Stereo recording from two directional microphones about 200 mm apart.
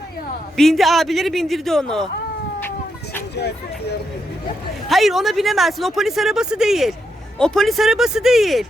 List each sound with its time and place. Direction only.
0.5 s speech: centre (ahead or behind)
3.3 s speech: 55° left (ahead or behind)
4.9 s speech: centre (ahead or behind)